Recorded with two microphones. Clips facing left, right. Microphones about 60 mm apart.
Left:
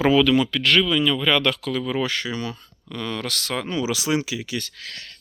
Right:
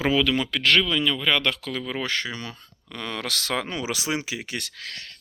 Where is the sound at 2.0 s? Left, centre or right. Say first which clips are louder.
Left 3 dB; right.